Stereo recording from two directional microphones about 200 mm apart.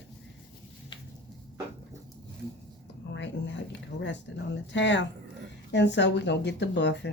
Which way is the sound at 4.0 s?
65° left (ahead or behind).